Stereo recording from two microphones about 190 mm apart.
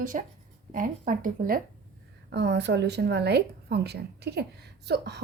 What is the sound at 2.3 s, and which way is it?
A woman's voice, 65° right (ahead or behind).